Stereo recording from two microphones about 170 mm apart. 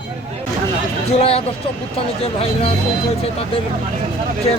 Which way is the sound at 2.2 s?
35° left (ahead or behind).